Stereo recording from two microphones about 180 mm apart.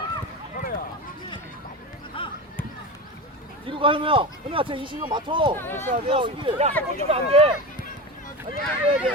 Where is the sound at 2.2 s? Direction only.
30° left (ahead or behind).